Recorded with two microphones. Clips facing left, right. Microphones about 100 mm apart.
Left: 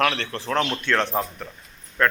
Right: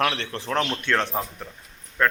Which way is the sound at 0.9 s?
5° right (ahead or behind).